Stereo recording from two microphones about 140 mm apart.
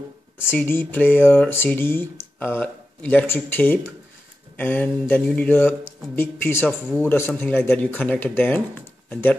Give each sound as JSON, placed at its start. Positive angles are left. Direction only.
{"t": 0.5, "sound": "speech", "side_deg": 15}